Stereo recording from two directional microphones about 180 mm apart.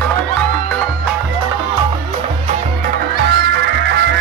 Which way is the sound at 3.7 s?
80° right.